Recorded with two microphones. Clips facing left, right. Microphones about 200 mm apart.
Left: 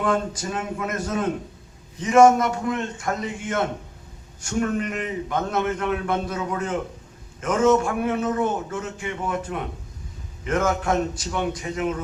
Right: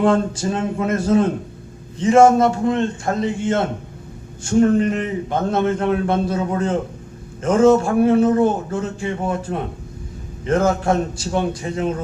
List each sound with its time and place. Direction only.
0.0 s a man's voice: 30° right (ahead or behind)